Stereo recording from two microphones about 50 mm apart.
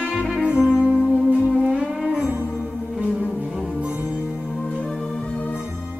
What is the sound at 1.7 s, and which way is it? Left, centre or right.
Music, centre.